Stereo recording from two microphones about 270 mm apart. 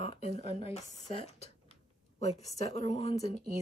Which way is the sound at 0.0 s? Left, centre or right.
Left.